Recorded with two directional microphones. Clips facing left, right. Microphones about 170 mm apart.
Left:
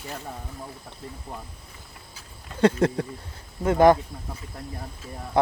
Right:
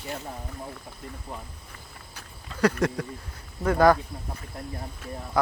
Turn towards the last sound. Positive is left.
turn(degrees=25)  # may be behind; listen again after turning